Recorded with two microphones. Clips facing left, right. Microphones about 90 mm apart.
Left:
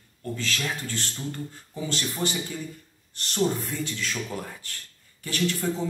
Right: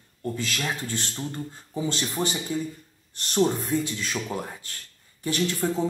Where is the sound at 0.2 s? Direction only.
15° right (ahead or behind).